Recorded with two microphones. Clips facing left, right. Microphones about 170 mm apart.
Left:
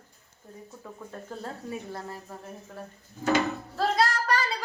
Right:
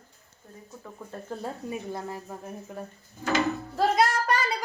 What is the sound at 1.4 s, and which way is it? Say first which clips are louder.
Speech: right 2 dB; 15° right (ahead or behind).